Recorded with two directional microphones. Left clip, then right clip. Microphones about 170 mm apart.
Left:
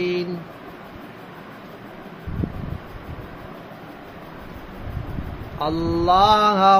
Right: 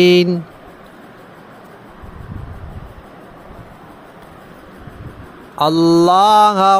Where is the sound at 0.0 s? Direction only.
90° right.